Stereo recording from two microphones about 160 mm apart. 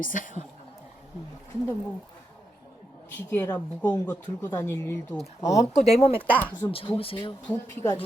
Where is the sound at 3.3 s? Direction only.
15° left (ahead or behind).